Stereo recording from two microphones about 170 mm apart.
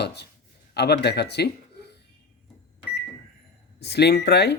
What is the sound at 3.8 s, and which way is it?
Speech, 75° left (ahead or behind).